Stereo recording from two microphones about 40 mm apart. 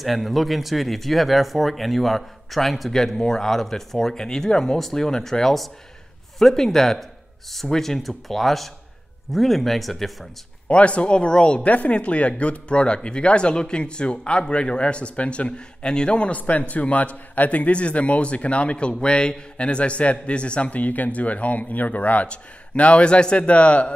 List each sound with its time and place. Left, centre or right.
0.0 s speech: centre
2.9 s speech: centre
10.7 s speech: left
11.6 s speech: left
16.3 s a man's voice: left